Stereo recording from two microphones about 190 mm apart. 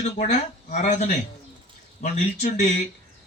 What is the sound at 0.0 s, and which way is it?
Speech, 40° left (ahead or behind).